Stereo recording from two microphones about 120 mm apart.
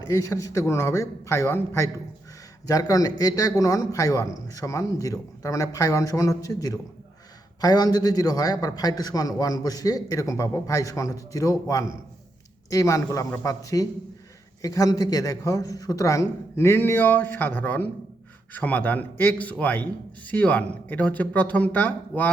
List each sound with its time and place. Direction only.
0.0 s a man's voice: 25° left (ahead or behind)